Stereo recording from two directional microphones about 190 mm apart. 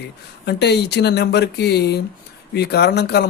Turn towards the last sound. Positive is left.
turn(degrees=60)  # may be behind; listen again after turning